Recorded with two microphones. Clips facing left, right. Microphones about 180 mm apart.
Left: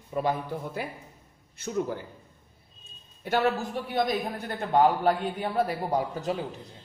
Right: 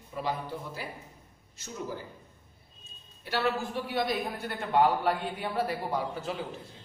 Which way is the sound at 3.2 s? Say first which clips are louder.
Left 4 dB; 50° left (ahead or behind).